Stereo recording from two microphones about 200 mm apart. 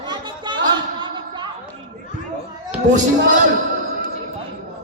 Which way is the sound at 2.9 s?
40° right (ahead or behind).